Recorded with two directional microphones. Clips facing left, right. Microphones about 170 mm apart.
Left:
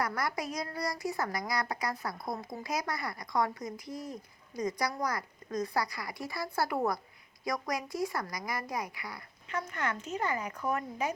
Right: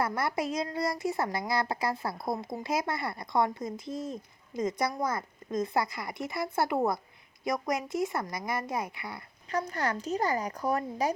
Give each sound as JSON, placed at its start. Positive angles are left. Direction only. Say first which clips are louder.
{"t": 0.0, "sound": "a woman's voice", "louder": "right 4 dB", "side_deg": -25}
{"t": 9.5, "sound": "speech", "louder": "right 4 dB", "side_deg": -35}